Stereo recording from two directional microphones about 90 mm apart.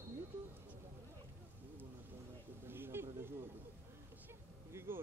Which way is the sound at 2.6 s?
25° right (ahead or behind).